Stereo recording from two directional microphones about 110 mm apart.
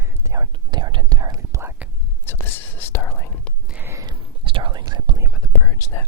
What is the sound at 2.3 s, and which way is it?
Whispering, 20° left (ahead or behind).